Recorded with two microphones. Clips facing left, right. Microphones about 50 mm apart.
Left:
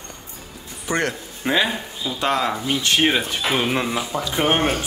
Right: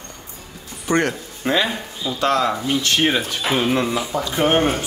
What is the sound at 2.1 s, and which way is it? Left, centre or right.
Speech, centre.